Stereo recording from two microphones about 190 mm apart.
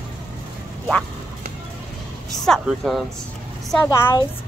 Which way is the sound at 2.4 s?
Centre (ahead or behind).